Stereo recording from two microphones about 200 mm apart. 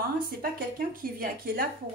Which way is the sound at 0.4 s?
45° right (ahead or behind).